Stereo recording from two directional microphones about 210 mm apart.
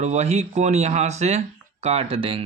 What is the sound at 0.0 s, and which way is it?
Speech, 30° right (ahead or behind).